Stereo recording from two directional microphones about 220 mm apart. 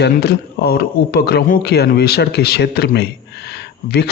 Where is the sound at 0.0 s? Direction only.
45° left (ahead or behind).